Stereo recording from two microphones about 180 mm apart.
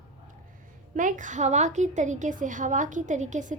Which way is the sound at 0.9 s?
45° right (ahead or behind).